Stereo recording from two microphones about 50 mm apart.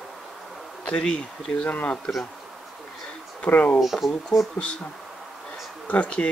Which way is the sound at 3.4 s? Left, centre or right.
Left.